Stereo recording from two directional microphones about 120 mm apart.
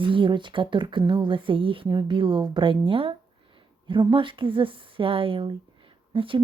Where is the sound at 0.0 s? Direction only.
45° right (ahead or behind).